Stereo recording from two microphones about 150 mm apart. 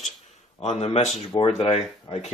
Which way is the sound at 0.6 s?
45° left (ahead or behind).